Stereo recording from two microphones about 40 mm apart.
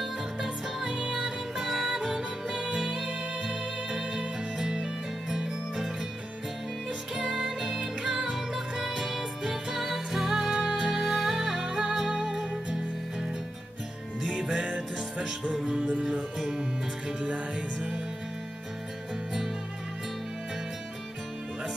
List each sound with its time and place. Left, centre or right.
0.8 s music: right
1.6 s music: centre
7.2 s music: centre
17.2 s music: right